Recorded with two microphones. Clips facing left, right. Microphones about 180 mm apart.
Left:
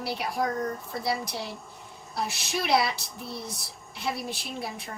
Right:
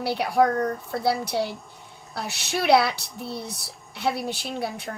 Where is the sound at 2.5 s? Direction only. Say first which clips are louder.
Right 6 dB; 65° right (ahead or behind).